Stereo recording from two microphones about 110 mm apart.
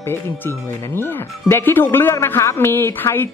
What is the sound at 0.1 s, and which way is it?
Speech, 20° left (ahead or behind).